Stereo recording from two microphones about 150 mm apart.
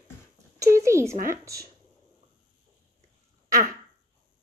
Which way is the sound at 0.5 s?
20° right (ahead or behind).